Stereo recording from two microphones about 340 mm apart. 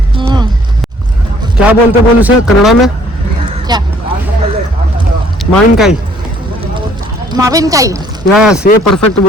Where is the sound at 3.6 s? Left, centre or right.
Centre.